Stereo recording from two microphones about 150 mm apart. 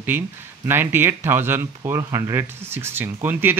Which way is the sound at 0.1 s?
15° right (ahead or behind).